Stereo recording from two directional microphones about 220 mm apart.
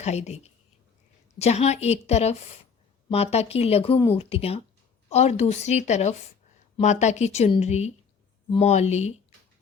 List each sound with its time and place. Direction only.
0.0 s a woman's voice: 30° left (ahead or behind)